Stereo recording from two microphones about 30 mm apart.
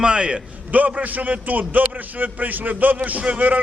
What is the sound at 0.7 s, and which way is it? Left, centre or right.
A man's voice, right.